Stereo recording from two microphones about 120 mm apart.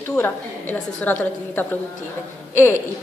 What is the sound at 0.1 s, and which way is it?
A woman's voice, 15° left (ahead or behind).